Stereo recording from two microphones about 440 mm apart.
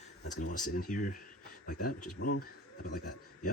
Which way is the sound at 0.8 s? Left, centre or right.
Centre.